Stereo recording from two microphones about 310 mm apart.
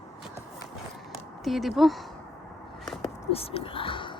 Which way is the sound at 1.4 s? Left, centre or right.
Centre.